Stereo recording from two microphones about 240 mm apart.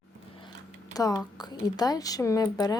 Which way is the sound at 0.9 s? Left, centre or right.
Centre.